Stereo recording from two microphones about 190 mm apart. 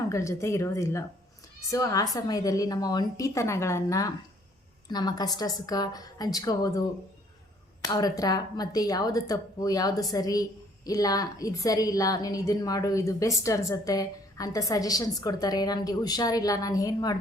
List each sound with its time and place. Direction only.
0.1 s a woman's voice: 15° left (ahead or behind)
7.9 s a woman's voice: 20° left (ahead or behind)